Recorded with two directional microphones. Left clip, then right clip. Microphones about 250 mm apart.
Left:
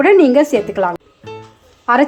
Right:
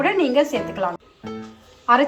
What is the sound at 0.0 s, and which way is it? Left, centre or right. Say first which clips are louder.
A woman's voice: left 9 dB; left.